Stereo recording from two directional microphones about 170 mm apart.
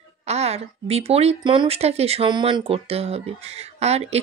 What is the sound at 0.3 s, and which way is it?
Speech, 40° right (ahead or behind).